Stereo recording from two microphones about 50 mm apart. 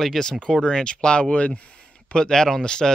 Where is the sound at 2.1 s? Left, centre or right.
Centre.